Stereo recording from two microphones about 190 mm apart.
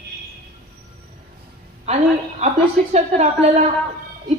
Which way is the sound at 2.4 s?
35° right (ahead or behind).